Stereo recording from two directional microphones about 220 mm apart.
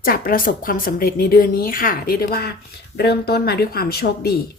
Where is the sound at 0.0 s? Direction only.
40° left (ahead or behind).